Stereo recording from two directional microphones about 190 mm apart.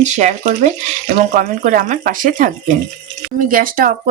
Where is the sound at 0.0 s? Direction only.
40° right (ahead or behind).